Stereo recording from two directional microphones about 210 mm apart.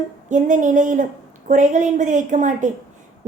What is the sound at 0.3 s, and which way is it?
A woman's voice, 35° right (ahead or behind).